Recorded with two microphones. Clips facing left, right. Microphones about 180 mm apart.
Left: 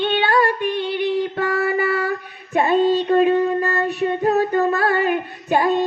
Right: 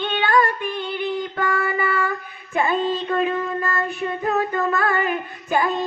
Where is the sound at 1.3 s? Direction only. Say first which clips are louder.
Left 3 dB; 35° left (ahead or behind).